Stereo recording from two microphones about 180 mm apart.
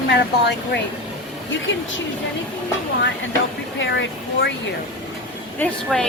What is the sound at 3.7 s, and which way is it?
Speech, 85° left.